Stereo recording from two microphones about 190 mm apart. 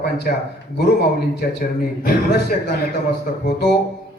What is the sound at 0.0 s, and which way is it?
A man's voice, 55° left (ahead or behind).